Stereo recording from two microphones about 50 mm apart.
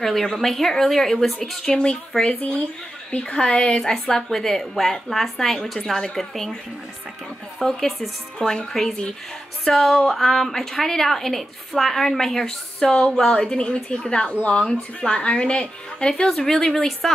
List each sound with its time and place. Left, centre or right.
0.0 s a woman's voice: centre
1.7 s speech: centre
4.0 s a woman's voice: centre
7.6 s a woman's voice: centre